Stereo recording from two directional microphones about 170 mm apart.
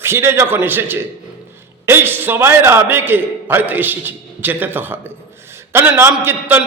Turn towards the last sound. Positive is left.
turn(degrees=-15)  # may be behind; listen again after turning